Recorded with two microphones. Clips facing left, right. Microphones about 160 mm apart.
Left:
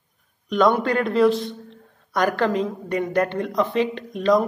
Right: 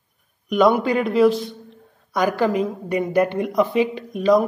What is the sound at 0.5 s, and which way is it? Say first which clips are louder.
A man's voice: right 2 dB; 5° right (ahead or behind).